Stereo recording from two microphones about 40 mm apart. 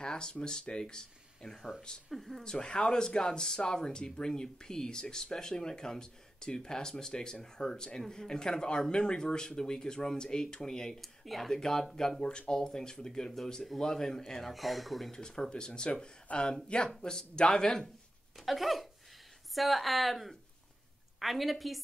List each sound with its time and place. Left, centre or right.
0.0 s speech: centre
2.4 s speech: left
11.0 s speech: centre
14.5 s speech: centre
15.0 s speech: centre
18.4 s speech: centre